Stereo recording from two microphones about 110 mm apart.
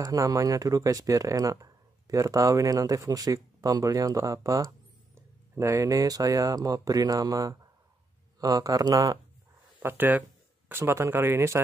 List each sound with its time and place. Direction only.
0.0 s speech: 30° right (ahead or behind)
9.8 s speech: 15° right (ahead or behind)